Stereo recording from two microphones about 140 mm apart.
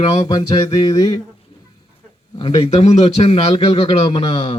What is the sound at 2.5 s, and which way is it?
Speech, 50° left (ahead or behind).